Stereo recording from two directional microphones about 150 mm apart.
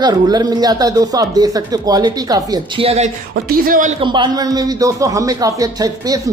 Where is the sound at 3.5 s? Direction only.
65° right (ahead or behind).